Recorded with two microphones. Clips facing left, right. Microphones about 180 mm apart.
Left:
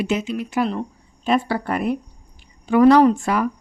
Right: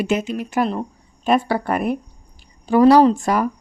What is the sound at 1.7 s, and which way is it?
Speech, 50° right (ahead or behind).